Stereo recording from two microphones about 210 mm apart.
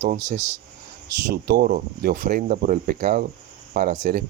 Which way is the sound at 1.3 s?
45° right (ahead or behind).